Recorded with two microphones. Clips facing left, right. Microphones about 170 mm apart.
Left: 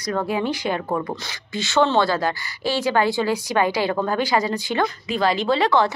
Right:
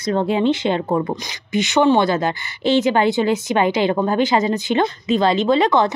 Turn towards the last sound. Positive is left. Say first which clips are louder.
# right 3 dB
turn(degrees=-20)  # may be behind; listen again after turning